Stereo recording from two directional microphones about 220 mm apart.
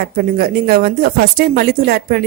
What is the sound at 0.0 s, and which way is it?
Speech, 45° right (ahead or behind).